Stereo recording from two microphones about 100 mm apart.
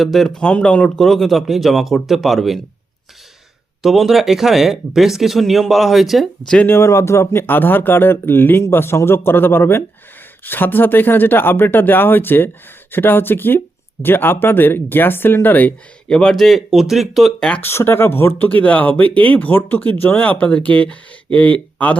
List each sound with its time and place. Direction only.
0.0 s speech: centre (ahead or behind)
3.8 s speech: centre (ahead or behind)
6.7 s speech: 25° left (ahead or behind)
16.0 s speech: 5° left (ahead or behind)
17.6 s speech: 25° left (ahead or behind)